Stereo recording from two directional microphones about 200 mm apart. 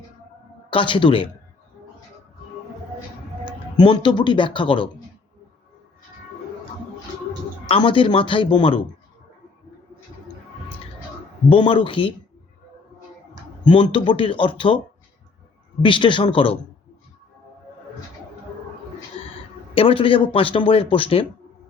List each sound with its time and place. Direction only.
0.7 s speech: 25° left (ahead or behind)
3.4 s speech: 20° left (ahead or behind)
7.7 s speech: 25° left (ahead or behind)
11.4 s speech: 25° left (ahead or behind)
13.7 s speech: 25° left (ahead or behind)
15.8 s speech: 25° left (ahead or behind)
19.2 s a sound: 25° left (ahead or behind)
19.7 s speech: 25° left (ahead or behind)